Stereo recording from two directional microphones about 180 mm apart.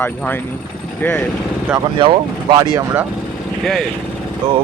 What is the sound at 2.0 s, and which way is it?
Speech, 25° right (ahead or behind).